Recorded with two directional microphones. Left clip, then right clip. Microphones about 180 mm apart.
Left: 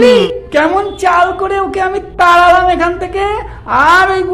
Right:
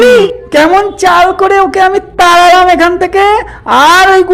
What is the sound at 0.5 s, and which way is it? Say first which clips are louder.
A man's voice: right 6 dB; 30° right (ahead or behind).